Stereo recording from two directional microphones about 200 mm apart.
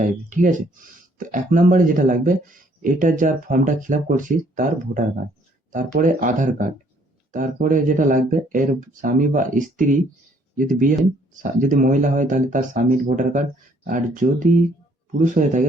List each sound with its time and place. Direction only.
0.0 s speech: 40° right (ahead or behind)